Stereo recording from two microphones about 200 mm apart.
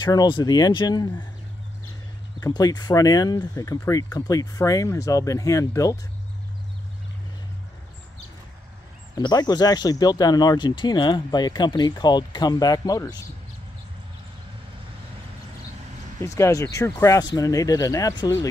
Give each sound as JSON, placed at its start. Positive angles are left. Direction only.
{"t": 0.0, "sound": "speech", "side_deg": 20}
{"t": 2.4, "sound": "speech", "side_deg": 20}
{"t": 9.1, "sound": "speech", "side_deg": 20}
{"t": 16.2, "sound": "speech", "side_deg": 15}